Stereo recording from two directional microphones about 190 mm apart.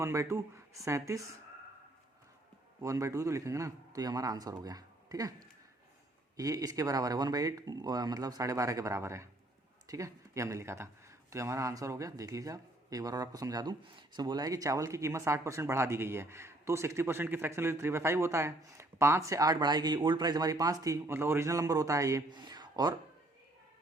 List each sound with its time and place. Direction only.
0.0 s speech: 15° right (ahead or behind)
2.8 s speech: 15° right (ahead or behind)
6.3 s speech: 20° right (ahead or behind)